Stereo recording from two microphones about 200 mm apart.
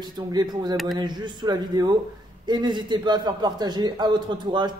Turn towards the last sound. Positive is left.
turn(degrees=-20)  # may be behind; listen again after turning